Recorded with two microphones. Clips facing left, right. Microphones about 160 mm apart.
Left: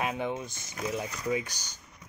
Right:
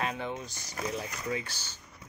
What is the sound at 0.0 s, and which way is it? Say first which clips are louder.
Speech: left 3 dB; 15° left (ahead or behind).